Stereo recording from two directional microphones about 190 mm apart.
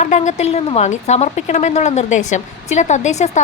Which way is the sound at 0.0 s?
40° left (ahead or behind).